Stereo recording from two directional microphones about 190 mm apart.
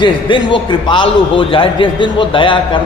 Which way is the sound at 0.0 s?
25° left (ahead or behind).